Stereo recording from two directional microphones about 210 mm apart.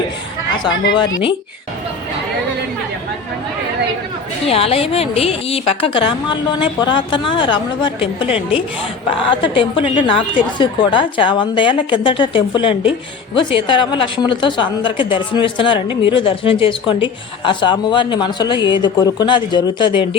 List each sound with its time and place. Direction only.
0.6 s a woman's voice: 20° left (ahead or behind)
4.4 s a woman's voice: 25° left (ahead or behind)